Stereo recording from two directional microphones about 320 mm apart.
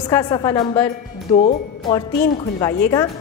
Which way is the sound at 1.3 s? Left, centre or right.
Left.